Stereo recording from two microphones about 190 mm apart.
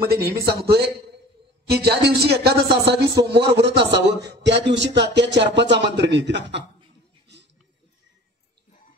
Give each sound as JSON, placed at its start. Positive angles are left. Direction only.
{"t": 0.0, "sound": "a man's voice", "side_deg": -55}